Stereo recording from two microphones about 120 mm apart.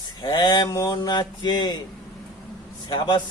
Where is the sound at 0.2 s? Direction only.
35° left (ahead or behind).